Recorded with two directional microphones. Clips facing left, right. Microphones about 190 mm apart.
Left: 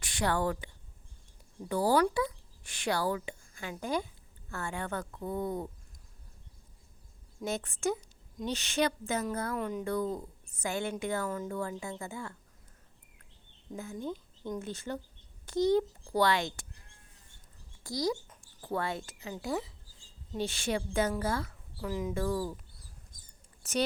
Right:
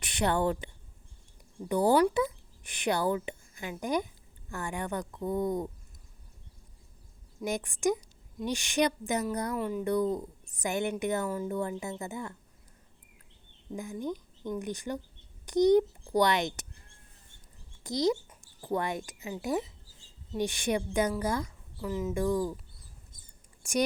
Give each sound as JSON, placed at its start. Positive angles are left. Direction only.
{"t": 0.0, "sound": "a woman's voice", "side_deg": -20}
{"t": 7.4, "sound": "a woman's voice", "side_deg": -15}
{"t": 9.6, "sound": "speech", "side_deg": -5}
{"t": 9.8, "sound": "a woman's voice", "side_deg": -15}
{"t": 14.6, "sound": "a woman's voice", "side_deg": -15}
{"t": 17.8, "sound": "a woman's voice", "side_deg": -20}
{"t": 21.4, "sound": "speech", "side_deg": 0}
{"t": 22.1, "sound": "a woman's voice", "side_deg": -15}
{"t": 23.6, "sound": "a woman's voice", "side_deg": -10}